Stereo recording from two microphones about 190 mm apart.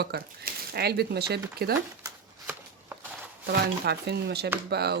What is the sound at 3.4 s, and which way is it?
Speech, 60° right (ahead or behind).